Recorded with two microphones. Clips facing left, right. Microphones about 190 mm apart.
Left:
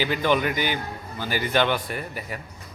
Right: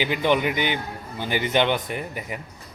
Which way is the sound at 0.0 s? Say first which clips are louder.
Right 1 dB; 20° right (ahead or behind).